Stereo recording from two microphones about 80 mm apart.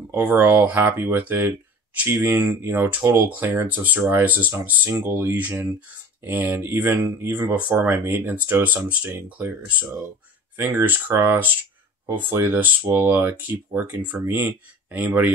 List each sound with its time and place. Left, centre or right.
0.1 s speech: right